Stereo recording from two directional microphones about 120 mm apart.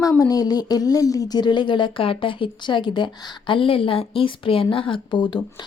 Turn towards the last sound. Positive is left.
turn(degrees=40)  # may be behind; listen again after turning